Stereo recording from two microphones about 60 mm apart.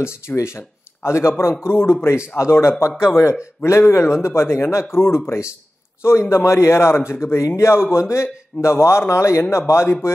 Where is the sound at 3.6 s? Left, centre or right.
Left.